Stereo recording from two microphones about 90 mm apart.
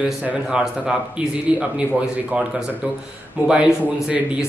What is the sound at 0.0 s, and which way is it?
Speech, 15° right (ahead or behind).